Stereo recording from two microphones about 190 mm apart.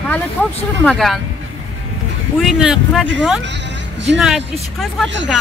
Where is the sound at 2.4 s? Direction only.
Centre (ahead or behind).